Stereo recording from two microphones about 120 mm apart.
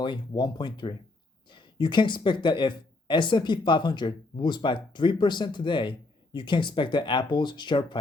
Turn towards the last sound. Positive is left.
turn(degrees=40)  # may be behind; listen again after turning